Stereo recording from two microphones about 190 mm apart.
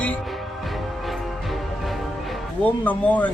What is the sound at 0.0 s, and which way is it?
Music, 5° left (ahead or behind).